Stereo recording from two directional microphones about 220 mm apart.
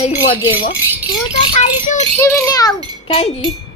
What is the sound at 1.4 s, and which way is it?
Speech, 30° left (ahead or behind).